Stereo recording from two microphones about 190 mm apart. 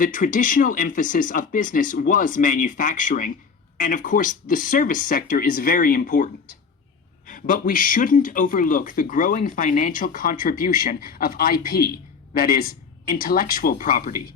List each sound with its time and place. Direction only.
0.0 s speech: 45° left (ahead or behind)